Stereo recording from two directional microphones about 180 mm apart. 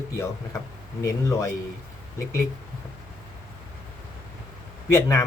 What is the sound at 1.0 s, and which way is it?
Speech, 15° left (ahead or behind).